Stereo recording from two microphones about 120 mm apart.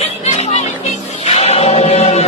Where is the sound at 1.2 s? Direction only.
60° left (ahead or behind).